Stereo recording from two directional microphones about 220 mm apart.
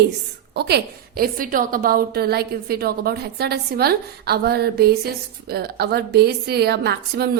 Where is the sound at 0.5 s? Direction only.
50° right (ahead or behind).